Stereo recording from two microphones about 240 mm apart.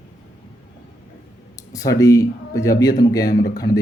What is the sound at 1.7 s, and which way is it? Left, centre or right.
Speech, centre.